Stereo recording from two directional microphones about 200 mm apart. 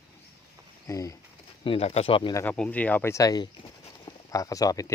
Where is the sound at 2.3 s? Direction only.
5° left (ahead or behind).